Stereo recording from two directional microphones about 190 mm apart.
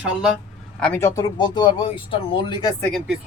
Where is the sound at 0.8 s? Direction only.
10° left (ahead or behind).